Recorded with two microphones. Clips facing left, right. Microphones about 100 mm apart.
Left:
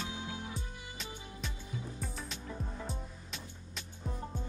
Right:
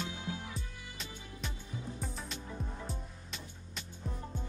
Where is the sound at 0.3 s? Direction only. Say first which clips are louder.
Right 1 dB; 30° left (ahead or behind).